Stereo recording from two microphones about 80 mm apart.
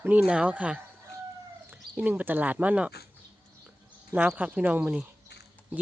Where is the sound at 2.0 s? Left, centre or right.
Right.